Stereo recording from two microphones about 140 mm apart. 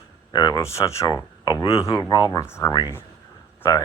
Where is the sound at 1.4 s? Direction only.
35° left (ahead or behind).